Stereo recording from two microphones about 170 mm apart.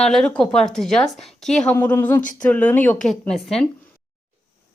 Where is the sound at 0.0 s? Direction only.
5° left (ahead or behind).